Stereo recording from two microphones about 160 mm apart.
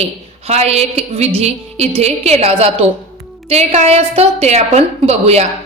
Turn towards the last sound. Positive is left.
turn(degrees=-40)  # may be behind; listen again after turning